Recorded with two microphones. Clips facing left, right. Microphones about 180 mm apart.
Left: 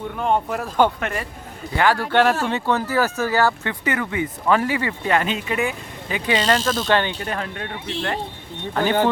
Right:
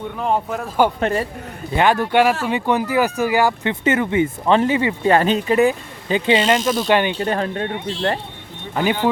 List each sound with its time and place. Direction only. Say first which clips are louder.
0.2 s speech: even; centre (ahead or behind)
0.9 s speech: right 7 dB; 30° right (ahead or behind)
1.7 s speech: right 3 dB; 20° right (ahead or behind)
5.0 s speech: right 6 dB; 35° right (ahead or behind)
6.4 s speech: right 3 dB; 10° right (ahead or behind)
7.2 s speech: right 7 dB; 30° right (ahead or behind)
8.7 s speech: right 1 dB; 10° right (ahead or behind)